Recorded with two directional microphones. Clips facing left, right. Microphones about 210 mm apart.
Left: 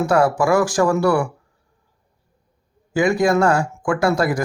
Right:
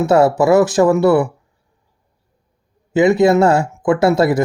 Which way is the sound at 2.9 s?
20° right (ahead or behind).